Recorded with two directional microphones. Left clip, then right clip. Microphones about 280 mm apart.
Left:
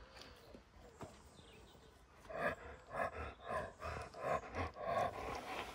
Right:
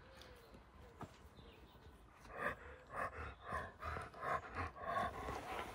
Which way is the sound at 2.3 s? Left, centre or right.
Left.